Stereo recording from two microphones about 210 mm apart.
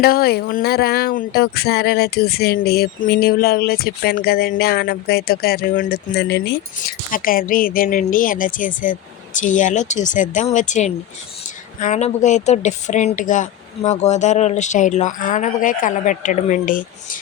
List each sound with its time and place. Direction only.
0.0 s speech: 45° left (ahead or behind)